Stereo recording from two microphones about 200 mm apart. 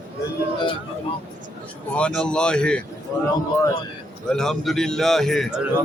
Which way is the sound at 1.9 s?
5° left (ahead or behind).